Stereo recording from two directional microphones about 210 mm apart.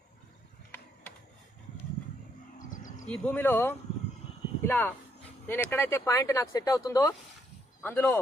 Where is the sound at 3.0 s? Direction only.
5° left (ahead or behind).